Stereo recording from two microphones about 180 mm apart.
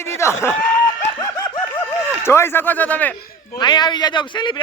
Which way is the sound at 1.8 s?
15° left (ahead or behind).